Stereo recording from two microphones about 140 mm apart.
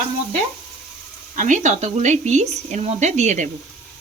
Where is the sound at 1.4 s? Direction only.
65° right (ahead or behind).